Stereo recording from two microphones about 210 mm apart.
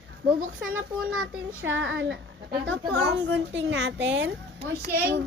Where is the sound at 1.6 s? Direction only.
60° right (ahead or behind).